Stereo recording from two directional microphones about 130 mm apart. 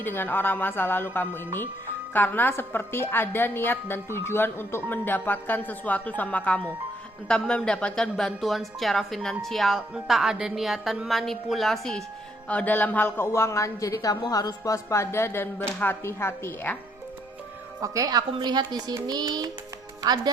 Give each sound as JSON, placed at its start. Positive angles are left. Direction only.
{"t": 0.0, "sound": "a woman's voice", "side_deg": 15}
{"t": 17.7, "sound": "speech", "side_deg": -25}